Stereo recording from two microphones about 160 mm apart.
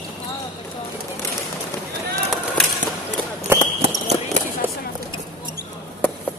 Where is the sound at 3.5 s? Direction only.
15° right (ahead or behind).